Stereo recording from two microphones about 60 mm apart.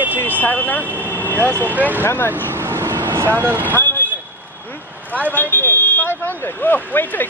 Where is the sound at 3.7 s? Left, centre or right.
Left.